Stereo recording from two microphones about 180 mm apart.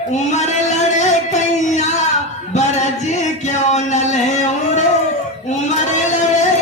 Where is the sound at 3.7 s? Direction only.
40° left (ahead or behind).